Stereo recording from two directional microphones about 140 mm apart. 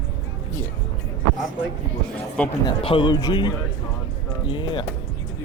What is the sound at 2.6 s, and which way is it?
A man's voice, 40° left (ahead or behind).